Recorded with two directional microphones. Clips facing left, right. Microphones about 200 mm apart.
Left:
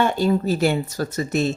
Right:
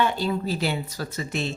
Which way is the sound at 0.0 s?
45° left (ahead or behind).